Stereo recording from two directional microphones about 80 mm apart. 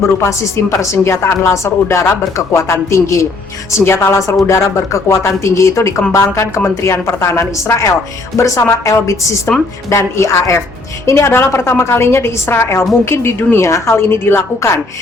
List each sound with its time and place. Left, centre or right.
0.2 s a woman's voice: left
9.5 s a woman's voice: centre
9.9 s a woman's voice: left